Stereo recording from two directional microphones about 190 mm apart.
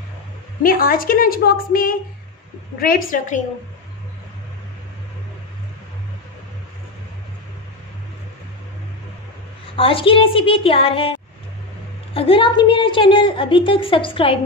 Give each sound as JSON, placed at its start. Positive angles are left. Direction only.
{"t": 0.6, "sound": "a woman's voice", "side_deg": 50}
{"t": 9.8, "sound": "a woman's voice", "side_deg": 30}